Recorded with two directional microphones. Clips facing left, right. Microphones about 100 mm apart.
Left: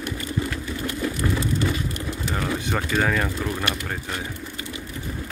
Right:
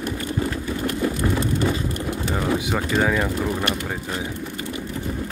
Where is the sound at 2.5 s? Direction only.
10° right (ahead or behind).